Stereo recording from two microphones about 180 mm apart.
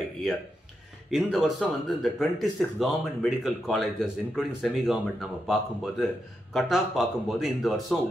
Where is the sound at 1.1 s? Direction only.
Centre (ahead or behind).